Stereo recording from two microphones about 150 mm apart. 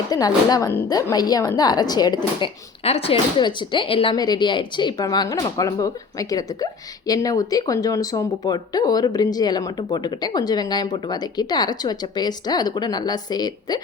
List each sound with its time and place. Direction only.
0.1 s speech: 25° left (ahead or behind)
2.8 s speech: 40° left (ahead or behind); by 13.7 s 25° left (ahead or behind)